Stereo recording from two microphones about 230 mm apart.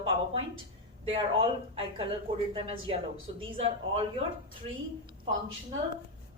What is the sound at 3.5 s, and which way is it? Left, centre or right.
Speech, right.